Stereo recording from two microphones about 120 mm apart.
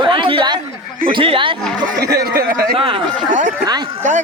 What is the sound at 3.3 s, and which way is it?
Speech, 90° right.